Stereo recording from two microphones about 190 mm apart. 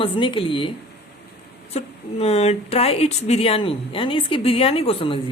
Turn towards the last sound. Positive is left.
turn(degrees=30)  # may be behind; listen again after turning